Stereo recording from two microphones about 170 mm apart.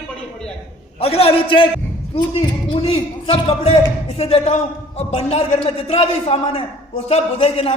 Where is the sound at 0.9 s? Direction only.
35° left (ahead or behind).